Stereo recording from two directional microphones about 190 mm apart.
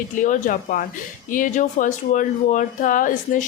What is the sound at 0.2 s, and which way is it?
Speech, 40° left (ahead or behind).